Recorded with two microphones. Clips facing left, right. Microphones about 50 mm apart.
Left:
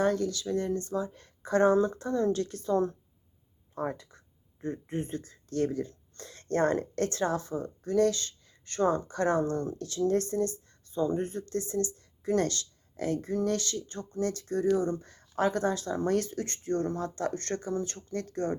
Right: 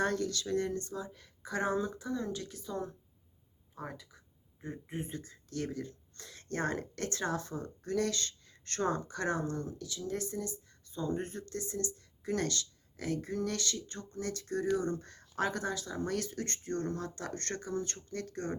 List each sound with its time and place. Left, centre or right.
0.0 s speech: centre
0.9 s speech: left
3.8 s speech: left
4.6 s speech: centre
5.5 s speech: left
8.4 s a sound: centre
8.9 s speech: left
15.6 s speech: left